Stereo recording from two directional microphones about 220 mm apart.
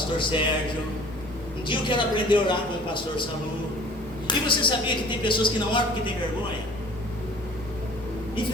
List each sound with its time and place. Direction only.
0.2 s a man's voice: 20° left (ahead or behind)
1.6 s a man's voice: 20° left (ahead or behind)
4.3 s a man's voice: 20° left (ahead or behind)